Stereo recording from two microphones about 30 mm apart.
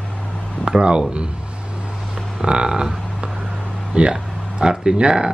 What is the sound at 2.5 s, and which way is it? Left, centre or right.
Speech, right.